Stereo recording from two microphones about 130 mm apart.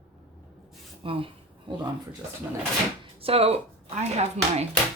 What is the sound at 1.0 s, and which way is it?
Speech, 45° right (ahead or behind).